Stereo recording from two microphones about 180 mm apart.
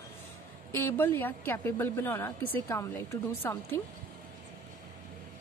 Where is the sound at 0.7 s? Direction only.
15° left (ahead or behind).